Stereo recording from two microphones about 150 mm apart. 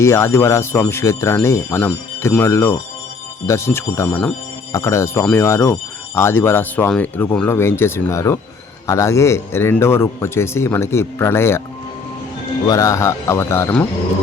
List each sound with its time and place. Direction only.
0.0 s speech: 15° left (ahead or behind)
12.6 s speech: 20° left (ahead or behind)